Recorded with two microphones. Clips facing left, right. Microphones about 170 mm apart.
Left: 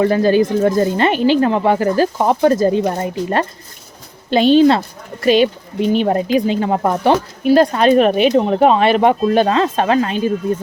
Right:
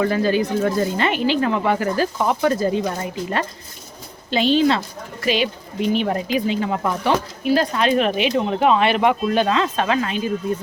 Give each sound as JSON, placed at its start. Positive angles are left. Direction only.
{"t": 0.0, "sound": "speech", "side_deg": 40}